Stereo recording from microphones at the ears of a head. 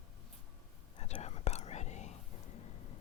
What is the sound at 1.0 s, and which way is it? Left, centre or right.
Whispering, left.